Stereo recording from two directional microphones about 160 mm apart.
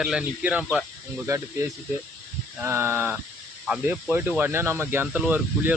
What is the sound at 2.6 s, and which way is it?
Speech, 15° right (ahead or behind).